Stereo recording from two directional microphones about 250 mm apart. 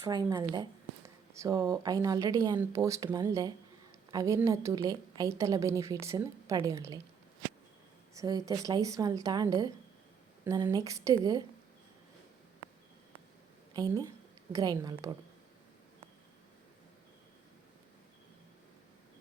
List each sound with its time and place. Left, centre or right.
0.0 s speech: centre
8.1 s speech: centre
13.7 s speech: centre